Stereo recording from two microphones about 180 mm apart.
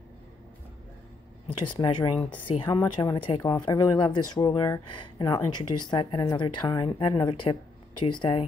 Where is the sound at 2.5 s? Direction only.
25° left (ahead or behind).